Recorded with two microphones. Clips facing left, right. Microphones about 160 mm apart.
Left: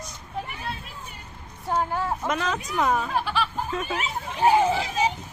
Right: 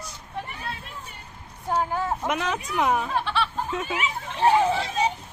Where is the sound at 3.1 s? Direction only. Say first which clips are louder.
Even; 10° left (ahead or behind).